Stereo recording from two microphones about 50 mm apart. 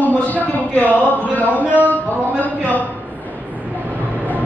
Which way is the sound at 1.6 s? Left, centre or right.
Right.